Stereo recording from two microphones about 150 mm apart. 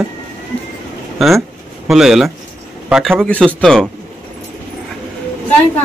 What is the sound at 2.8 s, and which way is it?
Speech, 5° right (ahead or behind).